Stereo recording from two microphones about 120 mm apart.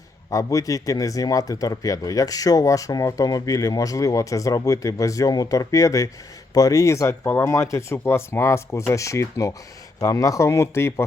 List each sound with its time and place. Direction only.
0.3 s speech: 25° left (ahead or behind)